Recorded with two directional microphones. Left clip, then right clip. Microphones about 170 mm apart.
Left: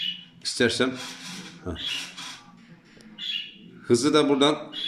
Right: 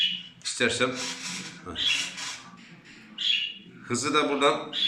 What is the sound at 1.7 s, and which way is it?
Speech, 50° left (ahead or behind).